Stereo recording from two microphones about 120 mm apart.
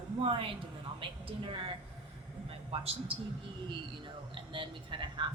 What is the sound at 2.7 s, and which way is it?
Speech, 55° right (ahead or behind).